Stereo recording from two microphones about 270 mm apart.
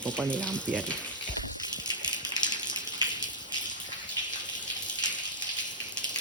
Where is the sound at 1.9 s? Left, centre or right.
Centre.